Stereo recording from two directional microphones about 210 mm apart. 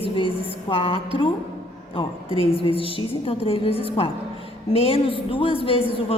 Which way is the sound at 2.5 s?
25° left (ahead or behind).